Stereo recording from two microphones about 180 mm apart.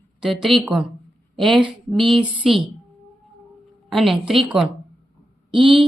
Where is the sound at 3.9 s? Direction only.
Centre (ahead or behind).